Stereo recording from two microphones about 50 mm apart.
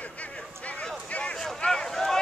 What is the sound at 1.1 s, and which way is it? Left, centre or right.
Vehicle, left.